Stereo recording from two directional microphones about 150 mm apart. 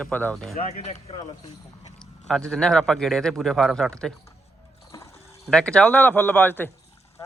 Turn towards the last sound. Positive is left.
turn(degrees=15)  # may be behind; listen again after turning